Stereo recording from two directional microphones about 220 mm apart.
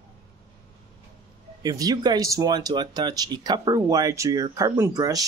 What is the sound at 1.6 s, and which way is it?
Speech, 15° right (ahead or behind).